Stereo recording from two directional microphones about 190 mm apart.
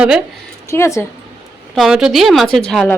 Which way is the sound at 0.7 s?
15° left (ahead or behind).